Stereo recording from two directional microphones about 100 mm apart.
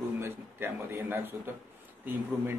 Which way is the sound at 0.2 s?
20° right (ahead or behind).